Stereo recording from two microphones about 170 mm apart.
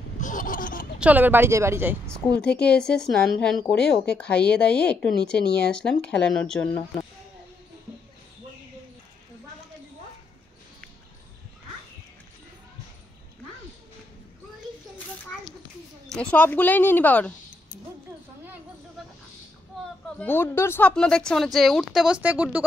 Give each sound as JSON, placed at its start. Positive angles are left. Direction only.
{"t": 0.2, "sound": "a sound", "side_deg": 50}
{"t": 0.9, "sound": "speech", "side_deg": -10}
{"t": 2.0, "sound": "speech", "side_deg": 5}
{"t": 16.1, "sound": "speech", "side_deg": 5}
{"t": 20.2, "sound": "speech", "side_deg": 10}